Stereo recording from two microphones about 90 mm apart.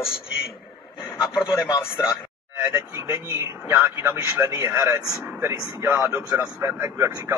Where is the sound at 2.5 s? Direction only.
30° right (ahead or behind).